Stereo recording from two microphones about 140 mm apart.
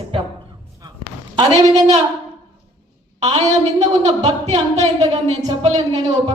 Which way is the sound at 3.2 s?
55° right (ahead or behind).